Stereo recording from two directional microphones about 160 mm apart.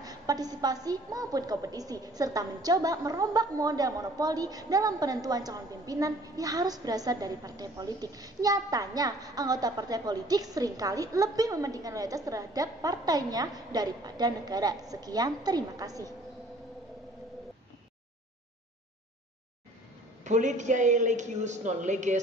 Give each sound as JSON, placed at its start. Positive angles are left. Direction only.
{"t": 0.0, "sound": "a woman's voice", "side_deg": -25}
{"t": 20.2, "sound": "a woman's voice", "side_deg": -50}